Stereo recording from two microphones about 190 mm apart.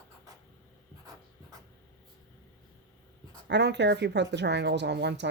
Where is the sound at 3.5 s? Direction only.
65° right (ahead or behind).